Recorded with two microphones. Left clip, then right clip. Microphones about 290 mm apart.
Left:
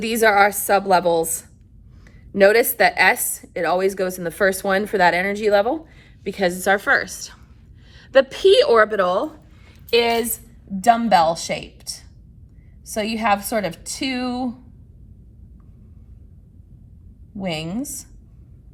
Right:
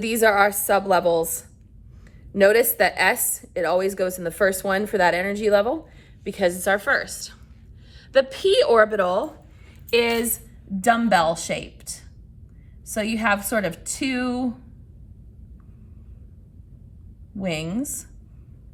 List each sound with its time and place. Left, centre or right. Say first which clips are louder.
0.0 s a woman's voice: left 2 dB; centre
9.9 s a woman's voice: left 3 dB; centre
17.3 s a woman's voice: left 1 dB; centre